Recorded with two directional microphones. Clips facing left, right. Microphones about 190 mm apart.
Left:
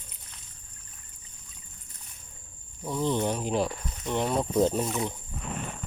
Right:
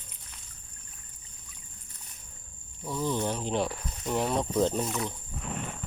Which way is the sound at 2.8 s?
20° left (ahead or behind).